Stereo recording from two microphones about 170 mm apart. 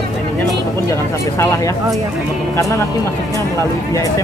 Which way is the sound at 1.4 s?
20° left (ahead or behind).